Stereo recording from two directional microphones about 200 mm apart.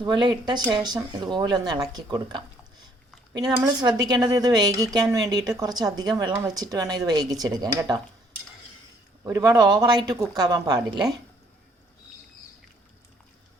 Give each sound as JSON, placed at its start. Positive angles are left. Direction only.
{"t": 0.0, "sound": "speech", "side_deg": -20}
{"t": 9.2, "sound": "speech", "side_deg": -15}